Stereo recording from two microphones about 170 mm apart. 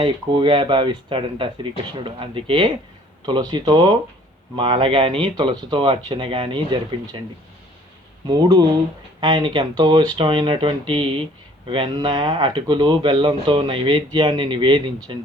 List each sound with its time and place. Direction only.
0.0 s speech: 30° right (ahead or behind)
8.3 s speech: 25° right (ahead or behind)